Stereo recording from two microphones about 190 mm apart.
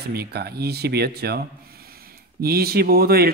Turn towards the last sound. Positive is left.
turn(degrees=-55)  # may be behind; listen again after turning